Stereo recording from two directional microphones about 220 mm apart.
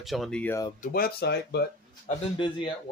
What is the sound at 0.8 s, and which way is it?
Speech, 40° left (ahead or behind).